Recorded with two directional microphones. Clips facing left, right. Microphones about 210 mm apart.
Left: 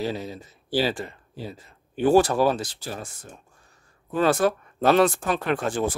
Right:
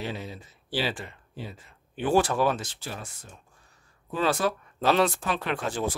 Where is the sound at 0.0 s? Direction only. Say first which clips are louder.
Left 6 dB; 40° left (ahead or behind).